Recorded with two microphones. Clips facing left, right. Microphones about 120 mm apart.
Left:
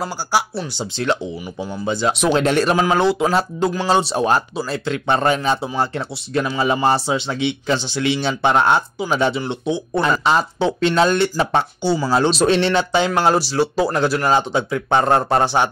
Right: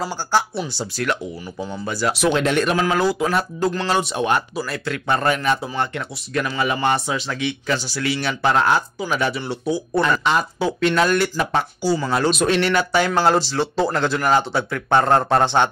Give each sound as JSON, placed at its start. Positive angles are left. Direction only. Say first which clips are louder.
{"t": 0.3, "sound": "speech", "louder": "even", "side_deg": 10}
{"t": 2.3, "sound": "speech", "louder": "left 3 dB", "side_deg": 35}
{"t": 13.1, "sound": "speech", "louder": "left 1 dB", "side_deg": 10}